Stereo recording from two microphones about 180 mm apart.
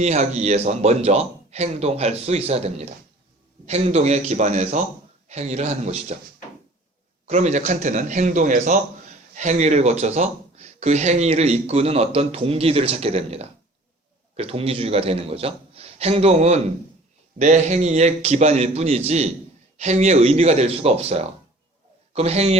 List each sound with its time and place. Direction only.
0.0 s a man's voice: 40° right (ahead or behind)
7.3 s a man's voice: 40° right (ahead or behind)